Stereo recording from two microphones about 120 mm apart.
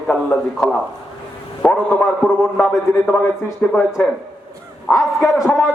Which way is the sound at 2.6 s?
5° right (ahead or behind).